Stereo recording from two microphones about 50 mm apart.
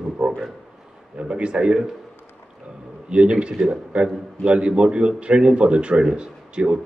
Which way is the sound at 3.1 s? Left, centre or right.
Right.